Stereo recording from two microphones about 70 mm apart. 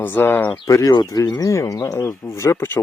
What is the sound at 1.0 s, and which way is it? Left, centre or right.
Speech, left.